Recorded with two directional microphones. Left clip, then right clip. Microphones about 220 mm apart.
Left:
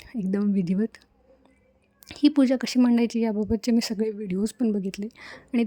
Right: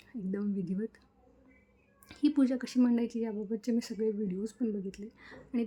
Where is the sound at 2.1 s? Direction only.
40° left (ahead or behind).